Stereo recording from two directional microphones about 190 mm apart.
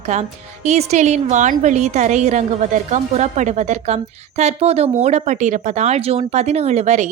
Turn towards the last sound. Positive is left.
turn(degrees=-35)  # may be behind; listen again after turning